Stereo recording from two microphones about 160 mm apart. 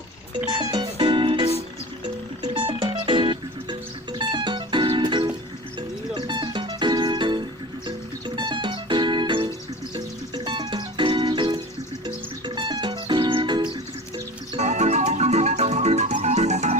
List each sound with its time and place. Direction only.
0.6 s music: 30° right (ahead or behind)
14.6 s music: 45° right (ahead or behind)